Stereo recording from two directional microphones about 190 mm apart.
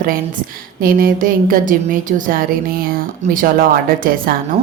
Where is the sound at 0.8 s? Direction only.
50° right (ahead or behind).